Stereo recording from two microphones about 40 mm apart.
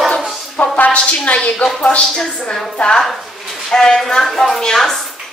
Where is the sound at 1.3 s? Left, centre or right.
Left.